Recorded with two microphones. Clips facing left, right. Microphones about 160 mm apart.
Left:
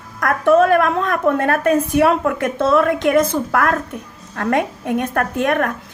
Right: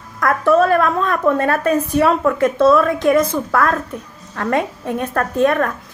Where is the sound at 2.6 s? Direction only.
20° left (ahead or behind).